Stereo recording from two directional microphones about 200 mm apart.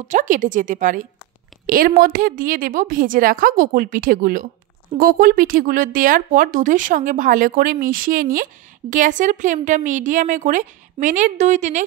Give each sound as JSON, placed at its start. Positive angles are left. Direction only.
{"t": 0.1, "sound": "a woman's voice", "side_deg": -40}